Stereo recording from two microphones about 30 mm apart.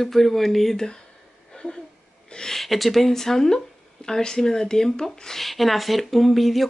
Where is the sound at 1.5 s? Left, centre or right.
Left.